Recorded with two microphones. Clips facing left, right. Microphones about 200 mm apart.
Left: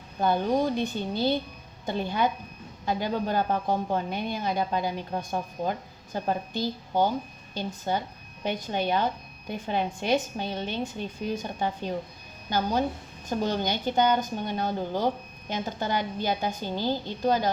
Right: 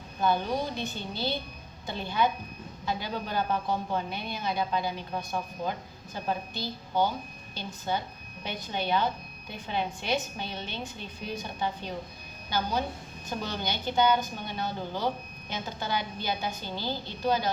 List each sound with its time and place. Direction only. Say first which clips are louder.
0.2 s speech: left 4 dB; 45° left (ahead or behind)